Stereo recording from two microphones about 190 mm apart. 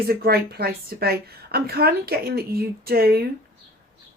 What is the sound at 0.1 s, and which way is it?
A woman's voice, 55° right (ahead or behind).